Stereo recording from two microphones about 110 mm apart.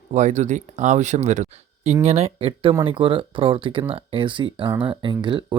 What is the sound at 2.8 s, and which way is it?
Speech, 50° right (ahead or behind).